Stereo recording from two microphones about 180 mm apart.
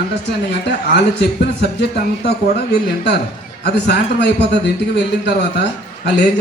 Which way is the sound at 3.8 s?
70° left (ahead or behind).